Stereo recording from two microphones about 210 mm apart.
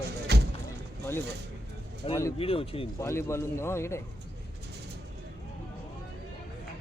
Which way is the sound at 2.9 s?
15° left (ahead or behind).